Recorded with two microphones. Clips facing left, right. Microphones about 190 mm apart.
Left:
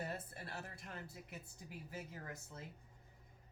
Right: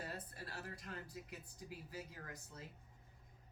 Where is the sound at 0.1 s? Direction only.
25° left (ahead or behind).